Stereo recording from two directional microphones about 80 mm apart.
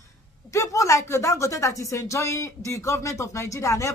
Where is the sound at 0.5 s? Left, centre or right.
Left.